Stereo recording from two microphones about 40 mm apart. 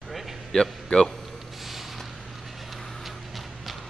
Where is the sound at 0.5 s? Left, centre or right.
Left.